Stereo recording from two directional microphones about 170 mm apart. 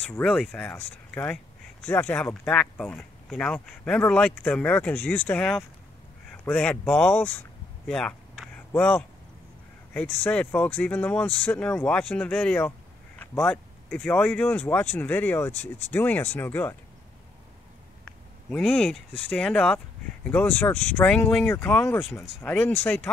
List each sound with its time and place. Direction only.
0.1 s speech: 5° left (ahead or behind)
6.3 s a sound: 5° left (ahead or behind)
9.9 s speech: 10° left (ahead or behind)
18.5 s speech: 5° left (ahead or behind)